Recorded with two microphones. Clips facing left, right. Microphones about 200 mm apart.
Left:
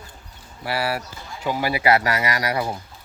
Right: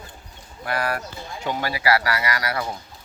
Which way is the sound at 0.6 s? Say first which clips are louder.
Left 1 dB; 5° left (ahead or behind).